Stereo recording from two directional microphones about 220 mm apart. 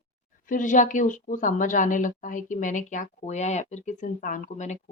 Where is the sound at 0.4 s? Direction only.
35° left (ahead or behind).